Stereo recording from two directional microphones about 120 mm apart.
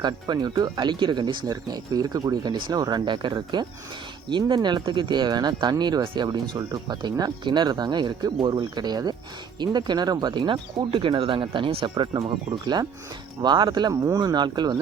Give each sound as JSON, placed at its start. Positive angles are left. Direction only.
{"t": 0.0, "sound": "speech", "side_deg": -35}
{"t": 13.4, "sound": "speech", "side_deg": -35}